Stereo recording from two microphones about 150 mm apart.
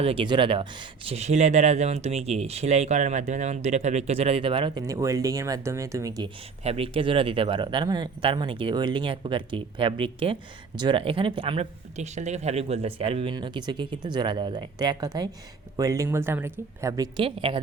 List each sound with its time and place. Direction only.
0.0 s speech: 35° right (ahead or behind)
6.7 s a woman's voice: 40° right (ahead or behind); by 17.1 s 20° right (ahead or behind)
17.2 s speech: 35° right (ahead or behind)